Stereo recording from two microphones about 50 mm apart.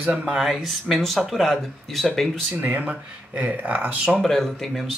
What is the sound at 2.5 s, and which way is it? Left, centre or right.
Speech, right.